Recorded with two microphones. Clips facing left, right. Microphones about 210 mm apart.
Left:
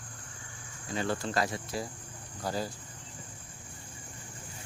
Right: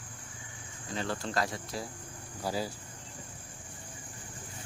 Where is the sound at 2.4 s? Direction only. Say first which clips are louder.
Even; 10° right (ahead or behind).